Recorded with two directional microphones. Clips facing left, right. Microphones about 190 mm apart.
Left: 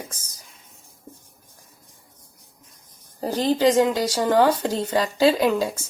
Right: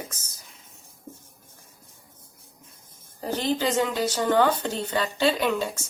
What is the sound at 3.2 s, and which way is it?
Speech, 35° left (ahead or behind).